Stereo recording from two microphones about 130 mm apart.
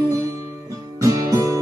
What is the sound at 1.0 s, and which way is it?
Music, 25° right (ahead or behind).